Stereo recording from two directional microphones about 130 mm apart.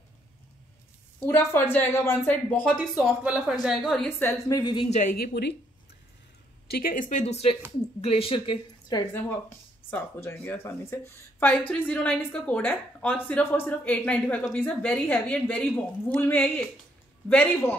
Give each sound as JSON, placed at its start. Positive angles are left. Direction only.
{"t": 1.2, "sound": "speech", "side_deg": 15}
{"t": 3.0, "sound": "a woman's voice", "side_deg": -10}
{"t": 4.2, "sound": "a woman's voice", "side_deg": 20}
{"t": 4.6, "sound": "speech", "side_deg": 35}
{"t": 4.8, "sound": "a woman's voice", "side_deg": 60}
{"t": 6.8, "sound": "speech", "side_deg": 90}
{"t": 8.0, "sound": "speech", "side_deg": 45}
{"t": 9.8, "sound": "speech", "side_deg": 15}